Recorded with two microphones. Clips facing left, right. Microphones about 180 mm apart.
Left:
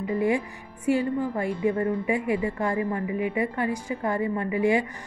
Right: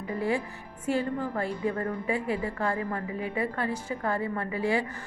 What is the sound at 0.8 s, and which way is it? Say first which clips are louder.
A woman's voice: left 4 dB; 10° left (ahead or behind).